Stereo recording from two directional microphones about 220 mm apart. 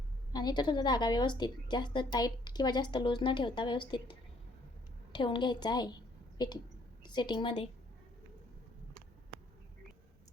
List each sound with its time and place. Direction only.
0.3 s a woman's voice: 20° left (ahead or behind)